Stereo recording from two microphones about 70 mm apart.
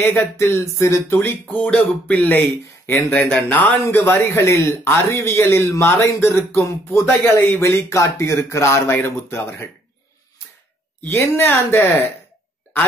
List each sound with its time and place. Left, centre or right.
0.0 s speech: left
11.1 s speech: left